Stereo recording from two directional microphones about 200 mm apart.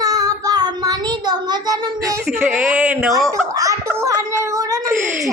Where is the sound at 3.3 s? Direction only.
15° right (ahead or behind).